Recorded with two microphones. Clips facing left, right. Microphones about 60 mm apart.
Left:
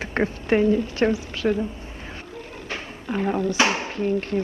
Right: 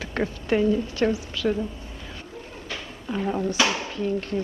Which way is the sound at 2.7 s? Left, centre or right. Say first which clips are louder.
Left 2 dB; left.